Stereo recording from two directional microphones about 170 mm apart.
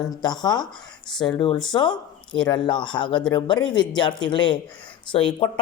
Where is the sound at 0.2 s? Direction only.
25° left (ahead or behind).